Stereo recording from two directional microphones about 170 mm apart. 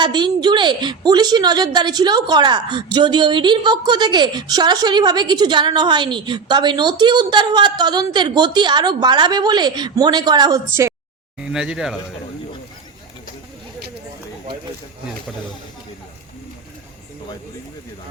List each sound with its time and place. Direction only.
0.0 s a woman's voice: 25° right (ahead or behind)
11.3 s speech: 5° right (ahead or behind)